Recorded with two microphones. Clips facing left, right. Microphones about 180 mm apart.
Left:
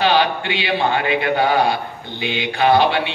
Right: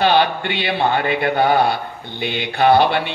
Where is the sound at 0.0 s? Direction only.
50° right (ahead or behind).